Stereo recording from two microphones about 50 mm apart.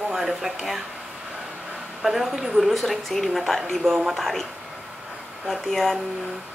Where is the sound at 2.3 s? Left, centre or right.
Centre.